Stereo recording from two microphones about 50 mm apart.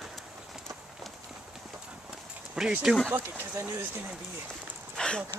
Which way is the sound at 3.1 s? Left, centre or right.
Right.